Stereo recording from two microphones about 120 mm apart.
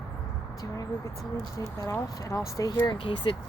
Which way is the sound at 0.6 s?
25° left (ahead or behind).